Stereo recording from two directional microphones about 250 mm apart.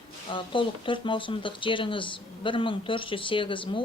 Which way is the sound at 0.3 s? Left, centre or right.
Centre.